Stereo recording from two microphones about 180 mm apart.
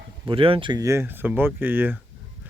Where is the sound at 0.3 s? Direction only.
30° right (ahead or behind); by 2.0 s 10° right (ahead or behind).